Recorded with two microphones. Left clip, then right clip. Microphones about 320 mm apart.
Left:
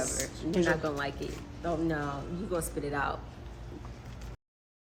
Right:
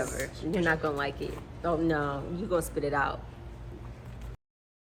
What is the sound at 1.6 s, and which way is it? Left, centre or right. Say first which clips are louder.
Speech: right 4 dB; centre.